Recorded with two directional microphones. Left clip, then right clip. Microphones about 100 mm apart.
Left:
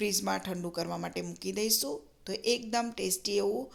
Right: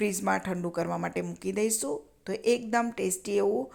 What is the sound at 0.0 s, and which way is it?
Speech, 45° right (ahead or behind).